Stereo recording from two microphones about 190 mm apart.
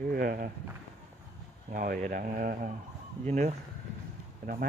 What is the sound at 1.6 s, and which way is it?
Speech, 50° right (ahead or behind).